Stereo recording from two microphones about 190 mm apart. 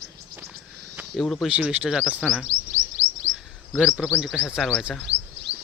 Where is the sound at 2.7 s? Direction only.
40° right (ahead or behind).